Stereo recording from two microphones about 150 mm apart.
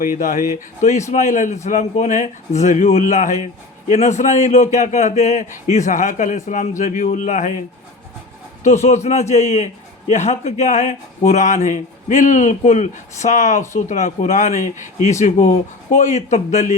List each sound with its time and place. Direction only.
0.0 s speech: 65° left (ahead or behind)
8.6 s speech: 50° left (ahead or behind)